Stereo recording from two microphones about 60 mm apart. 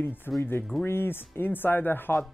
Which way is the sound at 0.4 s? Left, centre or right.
Left.